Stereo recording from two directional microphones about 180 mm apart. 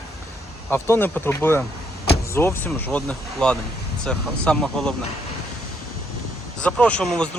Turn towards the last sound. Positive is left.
turn(degrees=5)  # may be behind; listen again after turning